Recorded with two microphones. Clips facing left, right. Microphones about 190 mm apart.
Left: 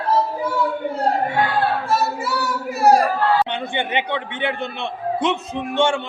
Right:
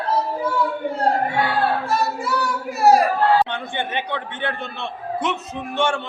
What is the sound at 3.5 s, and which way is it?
A man's voice, 20° left (ahead or behind).